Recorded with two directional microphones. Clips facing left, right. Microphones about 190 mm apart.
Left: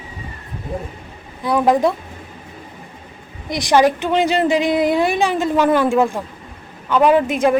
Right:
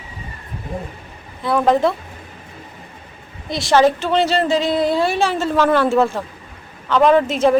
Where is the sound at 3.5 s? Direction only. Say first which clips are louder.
Even; 15° left (ahead or behind).